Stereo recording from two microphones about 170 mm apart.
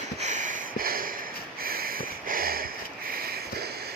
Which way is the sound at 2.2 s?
60° right (ahead or behind).